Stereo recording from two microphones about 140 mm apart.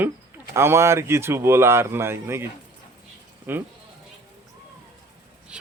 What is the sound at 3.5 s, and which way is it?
Speech, 15° right (ahead or behind).